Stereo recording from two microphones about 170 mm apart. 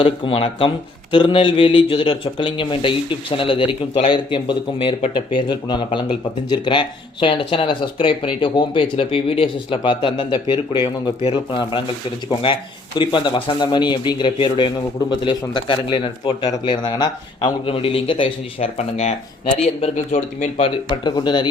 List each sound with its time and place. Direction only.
0.0 s speech: 30° left (ahead or behind)